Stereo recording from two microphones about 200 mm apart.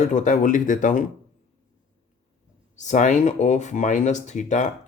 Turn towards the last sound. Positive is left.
turn(degrees=35)  # may be behind; listen again after turning